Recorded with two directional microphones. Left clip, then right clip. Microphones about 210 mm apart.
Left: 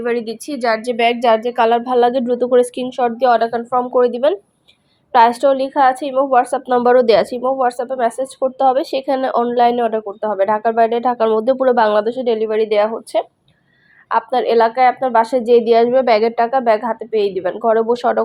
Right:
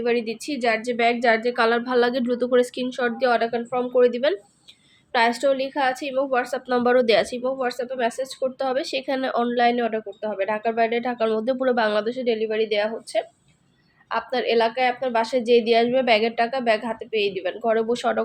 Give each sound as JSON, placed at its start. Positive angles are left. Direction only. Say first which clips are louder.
{"t": 0.0, "sound": "a woman's voice", "louder": "left 3 dB", "side_deg": 10}
{"t": 1.5, "sound": "a woman's voice", "louder": "left 6 dB", "side_deg": 10}
{"t": 1.9, "sound": "speech", "louder": "left 7 dB", "side_deg": 0}
{"t": 3.3, "sound": "a woman's voice", "louder": "left 7 dB", "side_deg": 15}
{"t": 5.5, "sound": "a woman's voice", "louder": "left 8 dB", "side_deg": 5}